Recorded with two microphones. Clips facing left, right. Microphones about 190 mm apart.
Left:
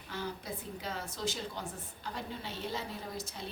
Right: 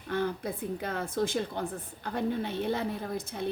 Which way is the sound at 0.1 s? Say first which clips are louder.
Right 9 dB; 60° right (ahead or behind).